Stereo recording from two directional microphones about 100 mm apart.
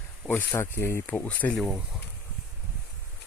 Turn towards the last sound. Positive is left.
turn(degrees=15)  # may be behind; listen again after turning